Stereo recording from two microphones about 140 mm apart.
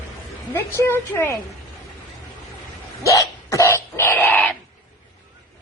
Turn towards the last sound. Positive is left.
turn(degrees=0)  # may be behind; listen again after turning